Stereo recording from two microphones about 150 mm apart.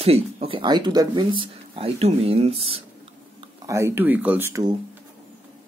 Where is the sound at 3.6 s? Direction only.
20° right (ahead or behind).